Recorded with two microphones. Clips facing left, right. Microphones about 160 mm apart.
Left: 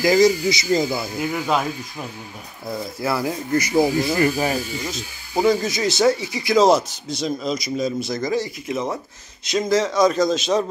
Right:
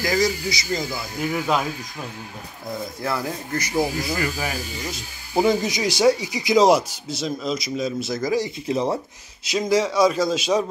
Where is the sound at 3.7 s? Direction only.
25° left (ahead or behind).